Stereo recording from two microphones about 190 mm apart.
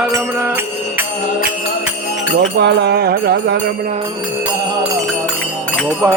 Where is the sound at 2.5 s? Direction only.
65° right (ahead or behind).